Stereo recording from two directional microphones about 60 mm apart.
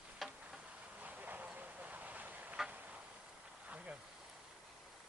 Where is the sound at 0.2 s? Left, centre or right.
Centre.